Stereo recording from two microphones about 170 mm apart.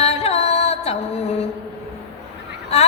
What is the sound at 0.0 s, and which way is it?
Music, 35° left (ahead or behind).